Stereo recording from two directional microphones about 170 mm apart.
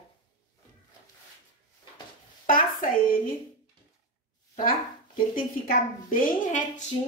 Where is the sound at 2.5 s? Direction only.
55° left (ahead or behind).